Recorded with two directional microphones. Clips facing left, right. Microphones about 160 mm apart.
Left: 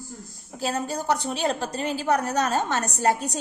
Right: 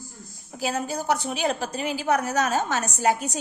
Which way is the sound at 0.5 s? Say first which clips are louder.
Even; 5° right (ahead or behind).